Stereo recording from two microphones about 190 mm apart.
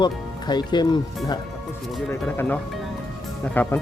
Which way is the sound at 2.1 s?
10° left (ahead or behind).